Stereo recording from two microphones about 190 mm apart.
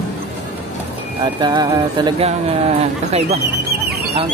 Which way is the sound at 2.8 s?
35° right (ahead or behind).